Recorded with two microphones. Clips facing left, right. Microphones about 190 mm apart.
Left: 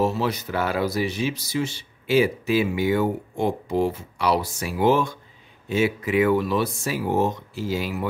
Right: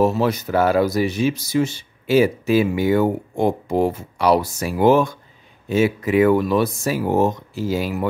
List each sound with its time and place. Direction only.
0.0 s speech: 50° right (ahead or behind)